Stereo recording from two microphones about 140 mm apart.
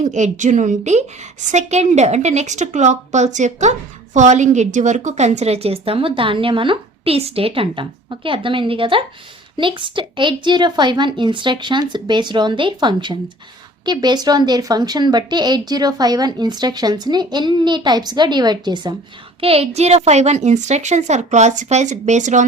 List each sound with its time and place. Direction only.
0.0 s a woman's voice: 60° right (ahead or behind); by 18.9 s 30° right (ahead or behind)
19.4 s a woman's voice: 45° right (ahead or behind); by 22.4 s 60° right (ahead or behind)